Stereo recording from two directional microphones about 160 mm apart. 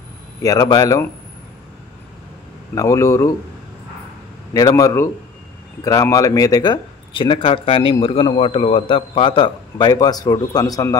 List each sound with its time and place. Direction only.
0.4 s speech: 20° left (ahead or behind)
2.7 s speech: 20° left (ahead or behind)
4.6 s speech: 20° left (ahead or behind)